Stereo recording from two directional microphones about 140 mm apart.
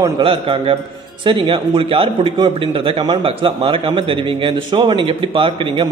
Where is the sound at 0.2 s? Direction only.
40° right (ahead or behind).